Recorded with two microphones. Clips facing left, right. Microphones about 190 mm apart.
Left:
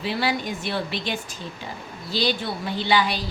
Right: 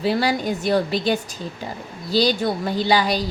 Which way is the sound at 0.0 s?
40° right (ahead or behind).